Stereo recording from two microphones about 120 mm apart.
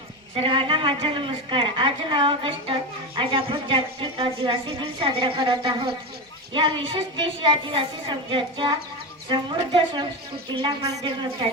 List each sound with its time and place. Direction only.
0.3 s a woman's voice: 45° right (ahead or behind)